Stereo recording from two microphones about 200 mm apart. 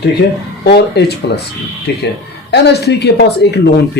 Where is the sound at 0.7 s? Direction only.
55° left (ahead or behind).